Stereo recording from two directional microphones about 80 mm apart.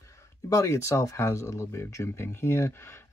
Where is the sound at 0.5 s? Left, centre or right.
Left.